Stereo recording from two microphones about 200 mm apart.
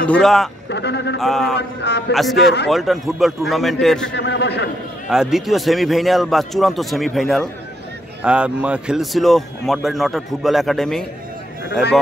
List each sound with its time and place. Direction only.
0.0 s a man's voice: 5° left (ahead or behind)
0.7 s a man's voice: 60° left (ahead or behind)
1.2 s a man's voice: centre (ahead or behind)
1.6 s a man's voice: 60° left (ahead or behind)
2.1 s a man's voice: centre (ahead or behind)
4.1 s a man's voice: 60° left (ahead or behind)
5.1 s a man's voice: centre (ahead or behind)